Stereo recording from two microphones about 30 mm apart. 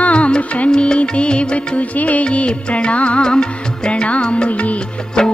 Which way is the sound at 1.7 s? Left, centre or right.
Left.